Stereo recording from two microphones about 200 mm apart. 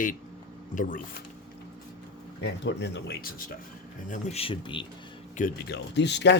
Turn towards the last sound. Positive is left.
turn(degrees=60)  # may be behind; listen again after turning